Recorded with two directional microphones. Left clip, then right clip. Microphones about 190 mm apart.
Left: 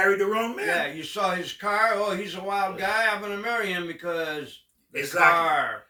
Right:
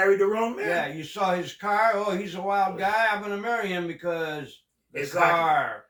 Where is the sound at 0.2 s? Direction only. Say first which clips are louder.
Right 1 dB; 15° left (ahead or behind).